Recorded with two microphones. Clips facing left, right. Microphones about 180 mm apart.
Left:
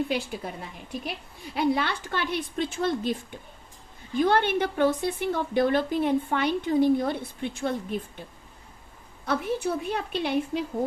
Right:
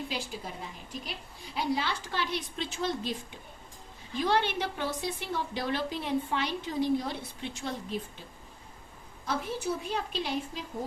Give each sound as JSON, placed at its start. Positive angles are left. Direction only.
{"t": 0.1, "sound": "a woman's voice", "side_deg": 60}
{"t": 1.5, "sound": "a woman's voice", "side_deg": 60}
{"t": 4.2, "sound": "a woman's voice", "side_deg": 55}
{"t": 9.2, "sound": "a woman's voice", "side_deg": 60}